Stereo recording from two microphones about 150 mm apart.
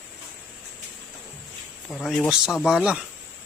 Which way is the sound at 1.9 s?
5° left (ahead or behind).